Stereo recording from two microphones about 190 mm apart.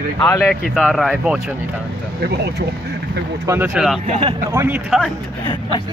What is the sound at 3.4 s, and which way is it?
Speech, 15° right (ahead or behind).